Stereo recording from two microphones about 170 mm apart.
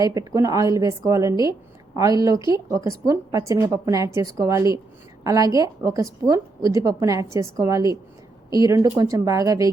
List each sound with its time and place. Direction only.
0.0 s a woman's voice: 20° right (ahead or behind)